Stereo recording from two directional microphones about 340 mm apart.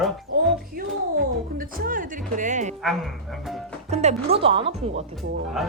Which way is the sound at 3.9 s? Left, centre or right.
Centre.